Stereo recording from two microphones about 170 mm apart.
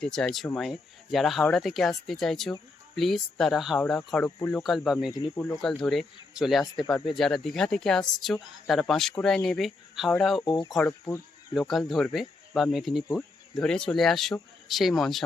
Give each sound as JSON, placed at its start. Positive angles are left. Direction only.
{"t": 0.0, "sound": "speech", "side_deg": 5}
{"t": 5.1, "sound": "speech", "side_deg": 10}
{"t": 5.6, "sound": "speech", "side_deg": 0}
{"t": 10.4, "sound": "speech", "side_deg": 25}
{"t": 11.5, "sound": "speech", "side_deg": 0}